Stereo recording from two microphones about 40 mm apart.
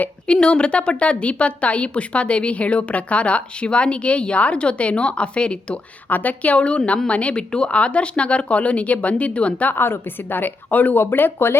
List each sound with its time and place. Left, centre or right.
0.3 s a woman's voice: left
6.1 s a woman's voice: left
7.3 s a woman's voice: left
9.7 s a woman's voice: left
10.9 s speech: left